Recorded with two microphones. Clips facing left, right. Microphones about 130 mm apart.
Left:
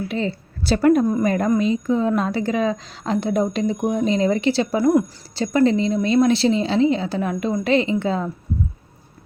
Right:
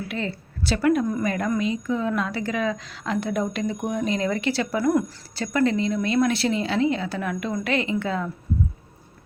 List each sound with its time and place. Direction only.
0.1 s a woman's voice: 30° left (ahead or behind)